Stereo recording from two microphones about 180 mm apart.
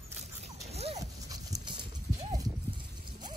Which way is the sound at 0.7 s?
35° right (ahead or behind).